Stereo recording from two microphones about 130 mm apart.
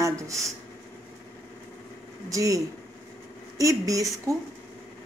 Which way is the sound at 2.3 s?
25° right (ahead or behind).